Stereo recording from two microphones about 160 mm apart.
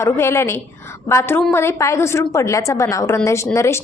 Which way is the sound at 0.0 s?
15° left (ahead or behind).